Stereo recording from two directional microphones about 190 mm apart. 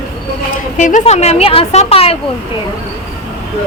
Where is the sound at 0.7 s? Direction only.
40° left (ahead or behind).